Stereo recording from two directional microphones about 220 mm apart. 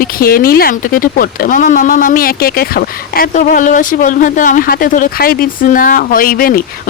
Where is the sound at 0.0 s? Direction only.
40° left (ahead or behind).